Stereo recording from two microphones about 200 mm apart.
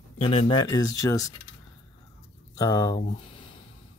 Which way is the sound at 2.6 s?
15° left (ahead or behind).